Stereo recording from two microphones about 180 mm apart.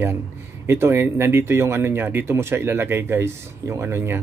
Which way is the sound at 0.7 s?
15° right (ahead or behind).